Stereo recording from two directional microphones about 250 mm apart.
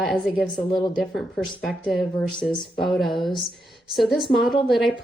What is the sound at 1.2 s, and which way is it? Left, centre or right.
A woman's voice, centre.